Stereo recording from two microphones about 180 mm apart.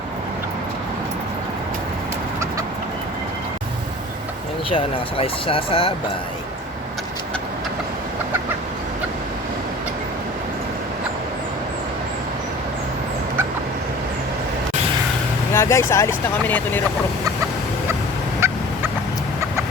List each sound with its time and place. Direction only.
4.7 s speech: 30° left (ahead or behind)
15.5 s speech: 15° left (ahead or behind)
18.3 s fowl: 15° right (ahead or behind)